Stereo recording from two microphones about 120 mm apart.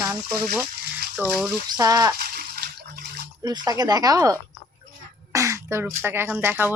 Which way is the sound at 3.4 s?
35° right (ahead or behind).